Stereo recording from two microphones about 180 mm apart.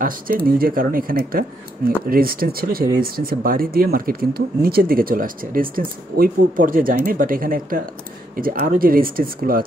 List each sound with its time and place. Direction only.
0.0 s speech: 55° right (ahead or behind)